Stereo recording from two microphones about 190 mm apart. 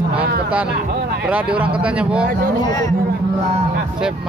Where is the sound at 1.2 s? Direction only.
5° right (ahead or behind).